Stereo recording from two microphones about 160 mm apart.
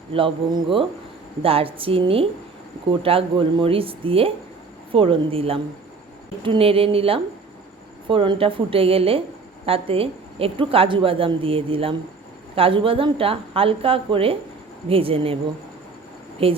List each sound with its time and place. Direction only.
0.1 s a woman's voice: 35° right (ahead or behind)
16.4 s a woman's voice: 35° right (ahead or behind)